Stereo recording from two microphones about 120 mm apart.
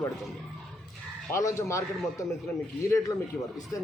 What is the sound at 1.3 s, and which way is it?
Speech, 25° left (ahead or behind).